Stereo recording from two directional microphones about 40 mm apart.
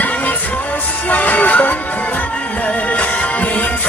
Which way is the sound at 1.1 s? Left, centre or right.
Left.